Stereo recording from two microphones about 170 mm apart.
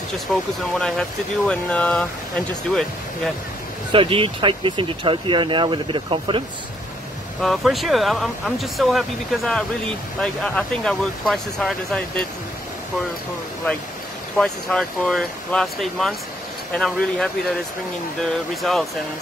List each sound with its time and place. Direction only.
0.3 s speech: centre (ahead or behind)
3.9 s speech: 30° right (ahead or behind)
7.4 s speech: centre (ahead or behind)
14.3 s speech: centre (ahead or behind)